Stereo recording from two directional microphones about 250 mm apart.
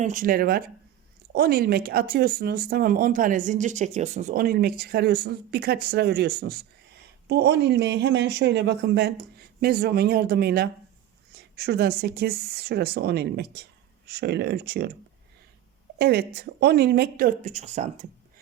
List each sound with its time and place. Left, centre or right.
0.0 s speech: right
16.0 s speech: right